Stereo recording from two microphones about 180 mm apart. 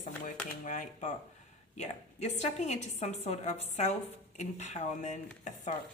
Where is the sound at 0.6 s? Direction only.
45° left (ahead or behind).